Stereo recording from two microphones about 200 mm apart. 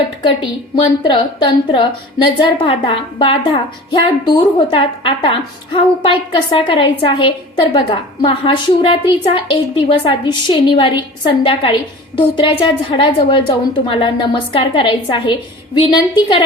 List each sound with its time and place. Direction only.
1.0 s a woman's voice: 25° left (ahead or behind)